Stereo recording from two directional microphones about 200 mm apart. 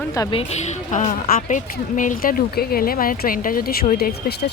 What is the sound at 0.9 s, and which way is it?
A woman's voice, 40° left (ahead or behind).